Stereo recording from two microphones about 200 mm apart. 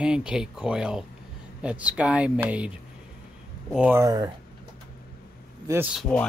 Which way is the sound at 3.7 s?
5° right (ahead or behind).